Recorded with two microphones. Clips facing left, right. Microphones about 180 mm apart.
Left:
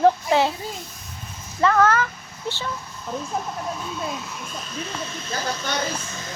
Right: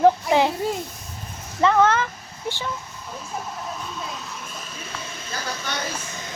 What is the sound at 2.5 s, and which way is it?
Speech, 15° right (ahead or behind).